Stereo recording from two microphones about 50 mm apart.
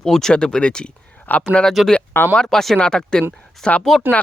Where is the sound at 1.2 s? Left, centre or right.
Left.